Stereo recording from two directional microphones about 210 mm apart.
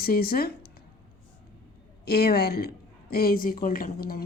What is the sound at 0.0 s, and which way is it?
Speech, 45° left (ahead or behind).